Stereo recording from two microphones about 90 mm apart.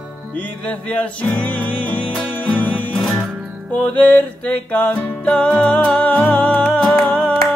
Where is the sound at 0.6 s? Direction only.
15° left (ahead or behind).